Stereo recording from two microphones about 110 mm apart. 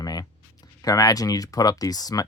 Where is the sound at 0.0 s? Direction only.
35° left (ahead or behind).